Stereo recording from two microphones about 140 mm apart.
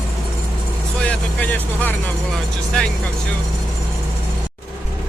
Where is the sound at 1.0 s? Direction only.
10° left (ahead or behind).